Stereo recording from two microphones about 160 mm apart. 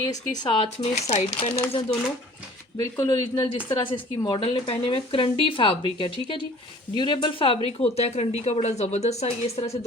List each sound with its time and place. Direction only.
0.1 s speech: 25° left (ahead or behind)
2.7 s speech: 20° left (ahead or behind); by 9.7 s 40° left (ahead or behind)